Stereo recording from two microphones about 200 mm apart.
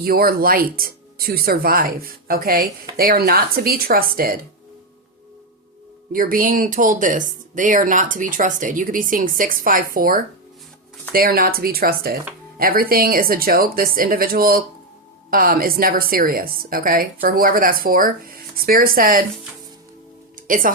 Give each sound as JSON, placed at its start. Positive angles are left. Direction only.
{"t": 0.0, "sound": "a woman's voice", "side_deg": -50}
{"t": 6.1, "sound": "a woman's voice", "side_deg": -45}
{"t": 20.5, "sound": "a woman's voice", "side_deg": -40}